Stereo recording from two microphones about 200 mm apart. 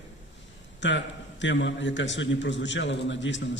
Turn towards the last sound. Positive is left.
turn(degrees=65)  # may be behind; listen again after turning